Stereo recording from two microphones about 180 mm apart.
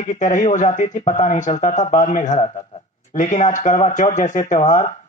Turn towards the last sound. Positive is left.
turn(degrees=45)  # may be behind; listen again after turning